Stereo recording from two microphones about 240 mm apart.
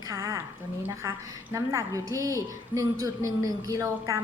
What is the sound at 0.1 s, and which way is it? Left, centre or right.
A woman's voice, centre.